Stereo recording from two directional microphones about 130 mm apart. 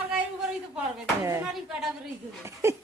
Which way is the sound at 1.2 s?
20° right (ahead or behind).